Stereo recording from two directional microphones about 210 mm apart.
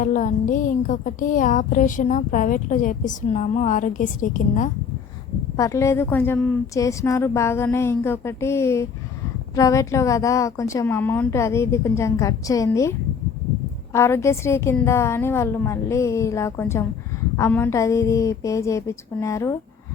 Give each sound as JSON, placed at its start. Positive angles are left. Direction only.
{"t": 0.0, "sound": "music", "side_deg": 35}
{"t": 5.5, "sound": "a woman's voice", "side_deg": 15}
{"t": 13.9, "sound": "a woman's voice", "side_deg": 15}